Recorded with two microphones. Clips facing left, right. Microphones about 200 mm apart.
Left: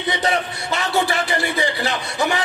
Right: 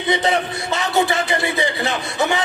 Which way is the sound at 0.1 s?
20° right (ahead or behind).